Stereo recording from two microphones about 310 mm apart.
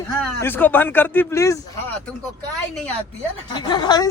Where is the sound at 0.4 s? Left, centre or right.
Centre.